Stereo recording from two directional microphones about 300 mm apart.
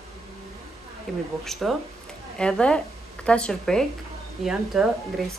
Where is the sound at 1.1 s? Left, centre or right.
Centre.